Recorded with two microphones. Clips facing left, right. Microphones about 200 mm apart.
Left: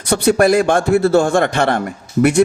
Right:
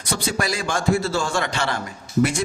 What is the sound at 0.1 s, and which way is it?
A man's voice, 60° left (ahead or behind).